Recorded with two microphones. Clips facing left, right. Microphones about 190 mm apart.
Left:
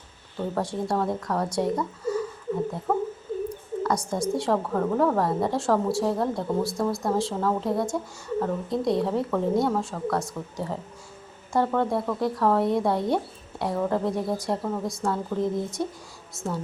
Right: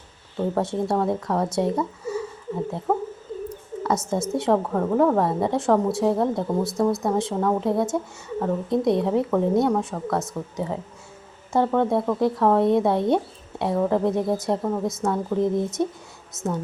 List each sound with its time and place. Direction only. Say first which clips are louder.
0.3 s speech: right 4 dB; 25° right (ahead or behind)
2.9 s a sound: right 2 dB; 20° right (ahead or behind)
3.8 s speech: right 2 dB; 25° right (ahead or behind)